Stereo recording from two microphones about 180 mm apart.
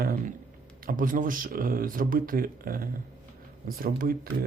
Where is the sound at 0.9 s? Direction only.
50° right (ahead or behind).